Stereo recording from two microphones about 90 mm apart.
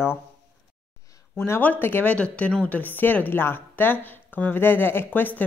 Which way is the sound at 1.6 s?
20° left (ahead or behind).